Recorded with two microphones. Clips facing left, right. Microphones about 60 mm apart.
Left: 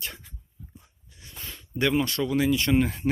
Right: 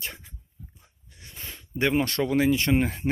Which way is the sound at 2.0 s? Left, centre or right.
Right.